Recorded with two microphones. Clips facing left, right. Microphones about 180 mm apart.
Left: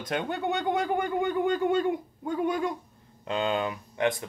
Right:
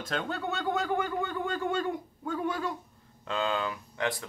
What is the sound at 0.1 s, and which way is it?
Speech, 15° left (ahead or behind).